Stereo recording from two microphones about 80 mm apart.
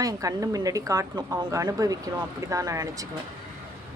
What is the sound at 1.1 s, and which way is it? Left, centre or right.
Speech, right.